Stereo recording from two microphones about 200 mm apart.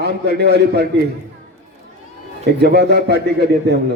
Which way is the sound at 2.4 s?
55° right (ahead or behind).